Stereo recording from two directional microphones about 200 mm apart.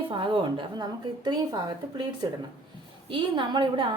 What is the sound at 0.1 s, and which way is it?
A woman's voice, 25° right (ahead or behind).